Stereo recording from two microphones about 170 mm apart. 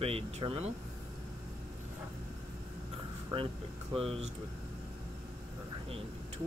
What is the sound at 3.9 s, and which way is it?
Speech, 35° right (ahead or behind).